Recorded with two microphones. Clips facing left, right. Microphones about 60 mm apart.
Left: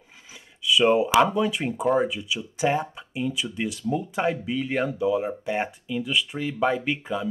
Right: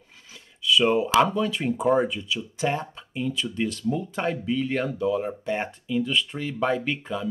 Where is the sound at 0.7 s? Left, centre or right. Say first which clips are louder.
Left 1 dB; centre.